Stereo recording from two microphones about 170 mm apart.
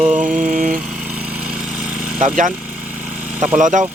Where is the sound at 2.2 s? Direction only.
50° right (ahead or behind).